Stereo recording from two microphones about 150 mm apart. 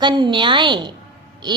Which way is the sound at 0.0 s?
30° right (ahead or behind).